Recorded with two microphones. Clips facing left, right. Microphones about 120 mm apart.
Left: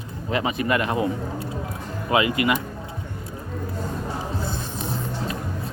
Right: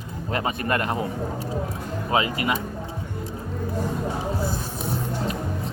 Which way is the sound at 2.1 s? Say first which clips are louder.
Left 3 dB; 30° right (ahead or behind).